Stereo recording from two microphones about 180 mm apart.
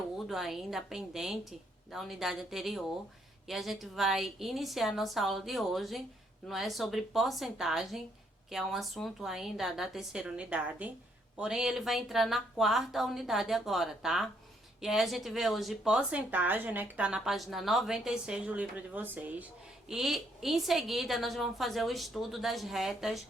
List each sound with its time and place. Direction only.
0.3 s a woman's voice: centre (ahead or behind)